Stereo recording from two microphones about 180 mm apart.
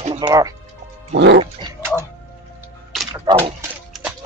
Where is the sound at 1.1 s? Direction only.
80° right.